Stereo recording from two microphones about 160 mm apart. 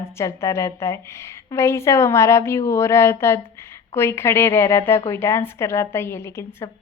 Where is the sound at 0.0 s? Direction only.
15° left (ahead or behind).